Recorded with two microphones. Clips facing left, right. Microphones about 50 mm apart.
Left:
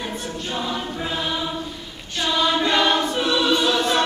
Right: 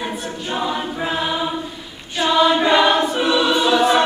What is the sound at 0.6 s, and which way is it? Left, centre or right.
Choir, centre.